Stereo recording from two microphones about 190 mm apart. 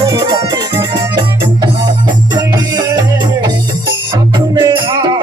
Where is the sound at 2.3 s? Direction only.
20° right (ahead or behind).